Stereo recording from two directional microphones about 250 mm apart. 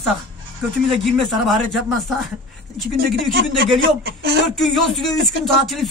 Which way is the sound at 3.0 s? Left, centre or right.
Right.